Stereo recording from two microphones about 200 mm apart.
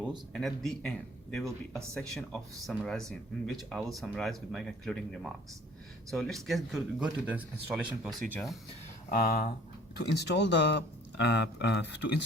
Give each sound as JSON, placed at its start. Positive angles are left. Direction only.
{"t": 0.3, "sound": "speech", "side_deg": 0}
{"t": 9.0, "sound": "speech", "side_deg": 45}
{"t": 10.0, "sound": "speech", "side_deg": 60}